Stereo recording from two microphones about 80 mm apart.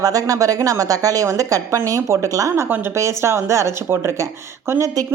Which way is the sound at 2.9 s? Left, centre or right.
Right.